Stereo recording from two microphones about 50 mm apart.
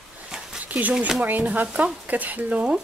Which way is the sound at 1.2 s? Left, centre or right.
Right.